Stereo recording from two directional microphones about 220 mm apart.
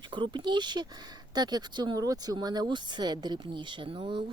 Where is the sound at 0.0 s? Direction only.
20° right (ahead or behind).